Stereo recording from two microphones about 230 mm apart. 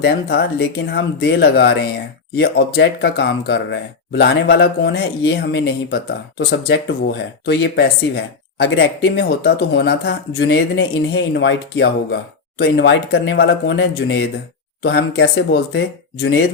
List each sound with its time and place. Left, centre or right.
0.0 s speech: left